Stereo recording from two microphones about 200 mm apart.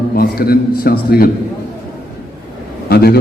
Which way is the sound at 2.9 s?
50° left (ahead or behind).